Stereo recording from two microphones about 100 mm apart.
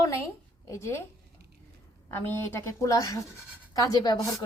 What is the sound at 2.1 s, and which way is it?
A woman's voice, 25° left (ahead or behind).